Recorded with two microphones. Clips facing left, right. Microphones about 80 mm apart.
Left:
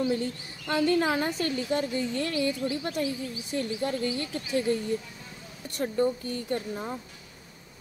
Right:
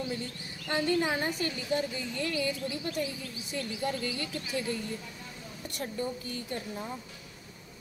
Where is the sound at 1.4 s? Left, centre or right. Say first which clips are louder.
Left 3 dB; left.